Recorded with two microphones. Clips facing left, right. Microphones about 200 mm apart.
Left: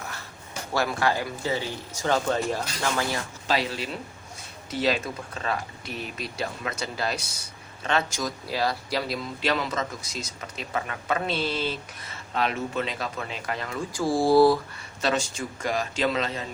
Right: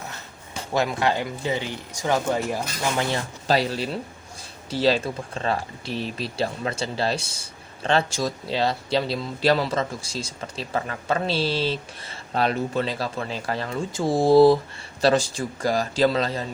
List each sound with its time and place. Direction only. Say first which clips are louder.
0.7 s speech: right 2 dB; 20° right (ahead or behind)
3.4 s speech: right 5 dB; 35° right (ahead or behind); by 14.6 s 20° right (ahead or behind)
15.0 s speech: right 6 dB; 35° right (ahead or behind)